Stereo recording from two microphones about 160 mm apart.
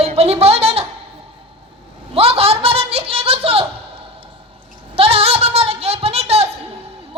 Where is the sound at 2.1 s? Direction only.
40° right (ahead or behind).